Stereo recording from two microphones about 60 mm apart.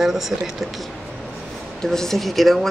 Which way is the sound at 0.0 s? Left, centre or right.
Centre.